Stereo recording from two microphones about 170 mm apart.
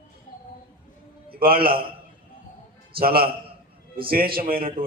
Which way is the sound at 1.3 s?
60° right (ahead or behind).